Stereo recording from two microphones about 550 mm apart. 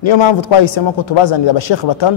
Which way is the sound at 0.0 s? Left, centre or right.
Left.